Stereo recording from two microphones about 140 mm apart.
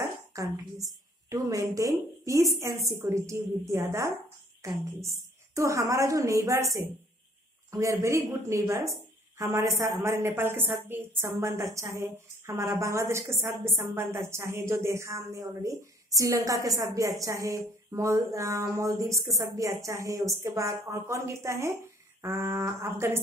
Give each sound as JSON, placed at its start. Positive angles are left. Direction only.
{"t": 0.3, "sound": "a woman's voice", "side_deg": -25}